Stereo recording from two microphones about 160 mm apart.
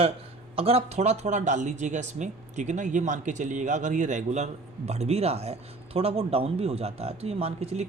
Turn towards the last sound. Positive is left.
turn(degrees=-40)  # may be behind; listen again after turning